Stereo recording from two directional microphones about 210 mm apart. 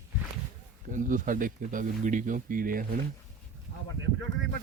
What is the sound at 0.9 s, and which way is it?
Speech, 40° right (ahead or behind).